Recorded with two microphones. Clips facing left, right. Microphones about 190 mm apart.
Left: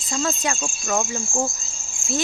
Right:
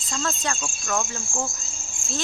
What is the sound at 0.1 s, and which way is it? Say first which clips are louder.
Cricket: left 4 dB; 10° left (ahead or behind).